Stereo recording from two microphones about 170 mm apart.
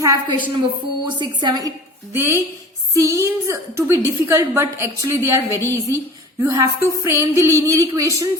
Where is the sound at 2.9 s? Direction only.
20° right (ahead or behind).